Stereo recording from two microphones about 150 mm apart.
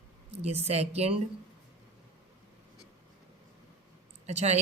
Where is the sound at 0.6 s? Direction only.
45° right (ahead or behind).